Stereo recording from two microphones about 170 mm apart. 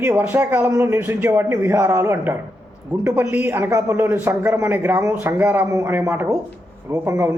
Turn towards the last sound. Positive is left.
turn(degrees=-15)  # may be behind; listen again after turning